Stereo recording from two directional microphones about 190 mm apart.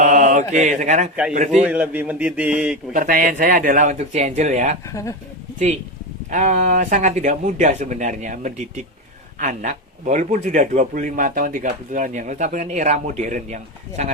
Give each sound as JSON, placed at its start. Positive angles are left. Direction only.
{"t": 0.0, "sound": "mantra", "side_deg": -40}
{"t": 1.3, "sound": "a man's voice", "side_deg": -40}
{"t": 1.6, "sound": "speech", "side_deg": -5}
{"t": 2.9, "sound": "speech", "side_deg": -45}
{"t": 4.9, "sound": "speech", "side_deg": 15}
{"t": 6.3, "sound": "a man's voice", "side_deg": -40}